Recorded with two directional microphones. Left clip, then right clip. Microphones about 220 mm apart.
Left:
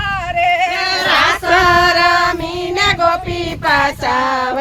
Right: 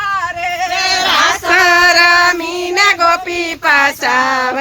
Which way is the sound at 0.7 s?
40° right (ahead or behind).